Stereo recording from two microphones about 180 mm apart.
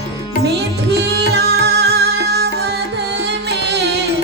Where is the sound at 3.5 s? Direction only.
70° right (ahead or behind).